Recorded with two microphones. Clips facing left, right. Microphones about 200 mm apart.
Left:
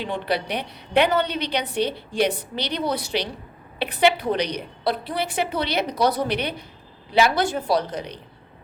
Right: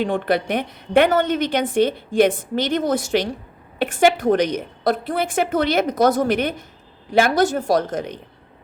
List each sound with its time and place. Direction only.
0.0 s a woman's voice: 50° right (ahead or behind)